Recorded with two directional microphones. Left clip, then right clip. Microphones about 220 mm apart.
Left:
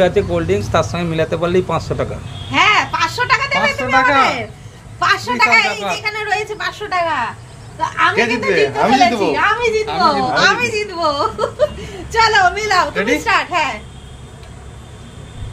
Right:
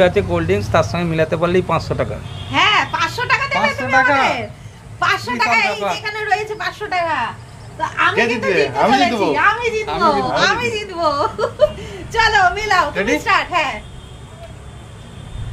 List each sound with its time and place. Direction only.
0.0 s speech: centre (ahead or behind)
2.5 s a sound: 15° left (ahead or behind)
4.9 s a woman's voice: 15° left (ahead or behind)
8.5 s speech: 10° right (ahead or behind)
9.3 s a woman's voice: 15° left (ahead or behind)